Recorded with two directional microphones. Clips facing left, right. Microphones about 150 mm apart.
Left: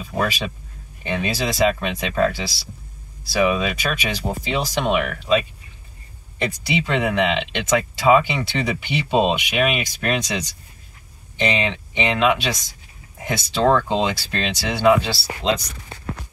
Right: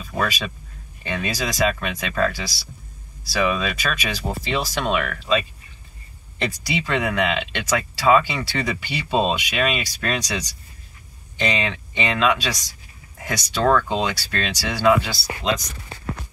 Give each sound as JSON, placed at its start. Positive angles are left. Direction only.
{"t": 0.0, "sound": "speech", "side_deg": 15}
{"t": 6.4, "sound": "speech", "side_deg": 20}